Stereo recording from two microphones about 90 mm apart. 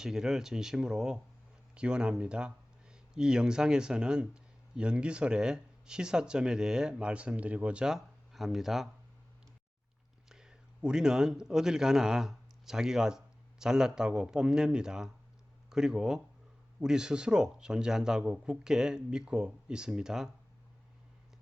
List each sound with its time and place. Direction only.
0.0 s speech: 5° right (ahead or behind)
10.2 s a man's voice: 5° right (ahead or behind)